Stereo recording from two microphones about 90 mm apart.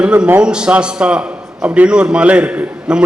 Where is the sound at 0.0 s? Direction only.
15° right (ahead or behind).